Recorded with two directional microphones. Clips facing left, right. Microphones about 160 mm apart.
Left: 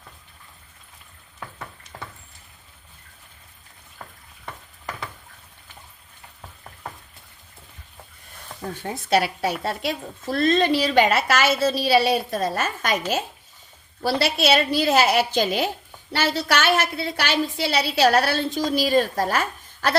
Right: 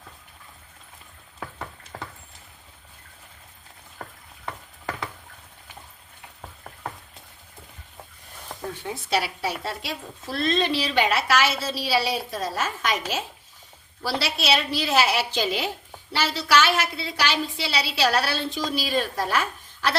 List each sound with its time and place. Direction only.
8.8 s a woman's voice: 50° left (ahead or behind)
14.0 s a woman's voice: 55° left (ahead or behind)